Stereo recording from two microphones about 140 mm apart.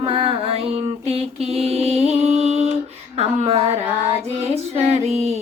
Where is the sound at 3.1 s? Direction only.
50° right (ahead or behind).